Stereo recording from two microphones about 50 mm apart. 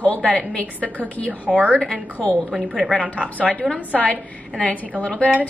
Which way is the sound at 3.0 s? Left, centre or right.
Left.